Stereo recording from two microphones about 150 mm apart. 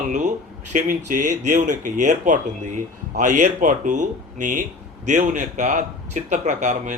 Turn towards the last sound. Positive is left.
turn(degrees=-50)  # may be behind; listen again after turning